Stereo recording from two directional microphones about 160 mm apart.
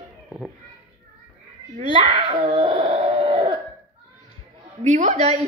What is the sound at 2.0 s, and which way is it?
Speech, 35° right (ahead or behind).